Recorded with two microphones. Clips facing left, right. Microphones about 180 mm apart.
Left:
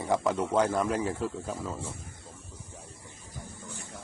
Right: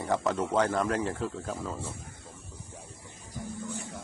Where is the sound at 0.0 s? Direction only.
10° left (ahead or behind).